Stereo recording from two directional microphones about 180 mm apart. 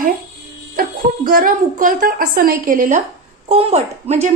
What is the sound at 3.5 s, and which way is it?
Speech, 35° right (ahead or behind).